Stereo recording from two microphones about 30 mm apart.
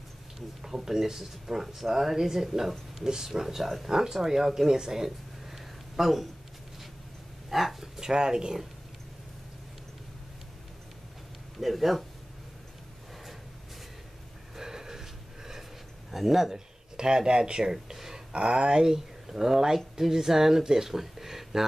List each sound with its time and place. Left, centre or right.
0.6 s speech: centre
3.0 s speech: centre
4.6 s a sound: right
7.4 s a sound: centre
8.0 s speech: right
11.6 s speech: centre
14.5 s a sound: centre
16.1 s speech: centre
16.9 s speech: right
17.9 s a sound: centre
18.3 s speech: right
18.9 s speech: centre